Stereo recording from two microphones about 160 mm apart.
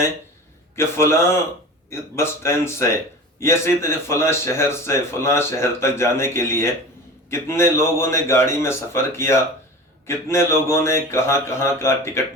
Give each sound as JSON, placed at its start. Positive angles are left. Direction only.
{"t": 0.8, "sound": "speech", "side_deg": 15}